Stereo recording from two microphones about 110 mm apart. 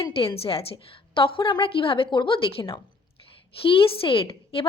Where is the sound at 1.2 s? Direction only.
50° left (ahead or behind).